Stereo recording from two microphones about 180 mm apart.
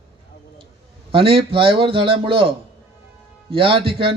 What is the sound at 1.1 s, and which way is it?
Speech, 30° right (ahead or behind).